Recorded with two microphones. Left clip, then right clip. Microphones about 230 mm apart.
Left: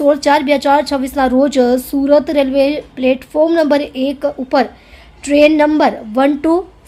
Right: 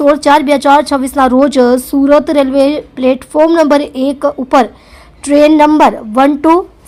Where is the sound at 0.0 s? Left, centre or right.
Centre.